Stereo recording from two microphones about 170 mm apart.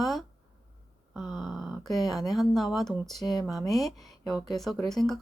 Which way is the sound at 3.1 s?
25° left (ahead or behind).